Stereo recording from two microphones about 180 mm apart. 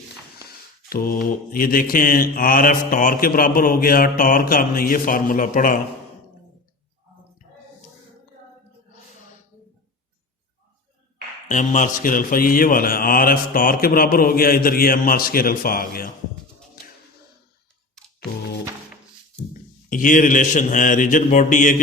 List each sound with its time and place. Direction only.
0.9 s mantra: 55° left (ahead or behind)
11.4 s mantra: 45° left (ahead or behind)
19.9 s mantra: 50° left (ahead or behind)